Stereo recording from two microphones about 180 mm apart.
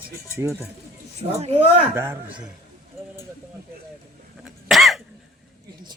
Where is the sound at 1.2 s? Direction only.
35° right (ahead or behind).